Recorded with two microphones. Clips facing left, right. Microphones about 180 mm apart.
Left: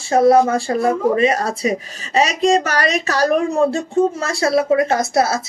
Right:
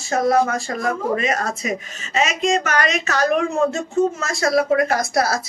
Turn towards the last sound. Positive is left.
turn(degrees=25)  # may be behind; listen again after turning